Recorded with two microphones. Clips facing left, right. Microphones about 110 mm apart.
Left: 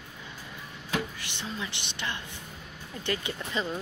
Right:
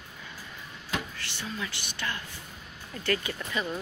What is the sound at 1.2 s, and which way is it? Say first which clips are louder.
Speech: even; 20° left (ahead or behind).